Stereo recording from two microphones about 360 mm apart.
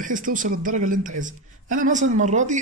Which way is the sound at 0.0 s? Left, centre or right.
Right.